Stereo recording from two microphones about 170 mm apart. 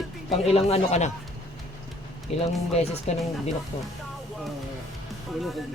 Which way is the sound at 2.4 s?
40° left (ahead or behind).